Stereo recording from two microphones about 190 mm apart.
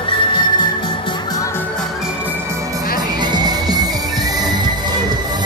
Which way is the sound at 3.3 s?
20° right (ahead or behind).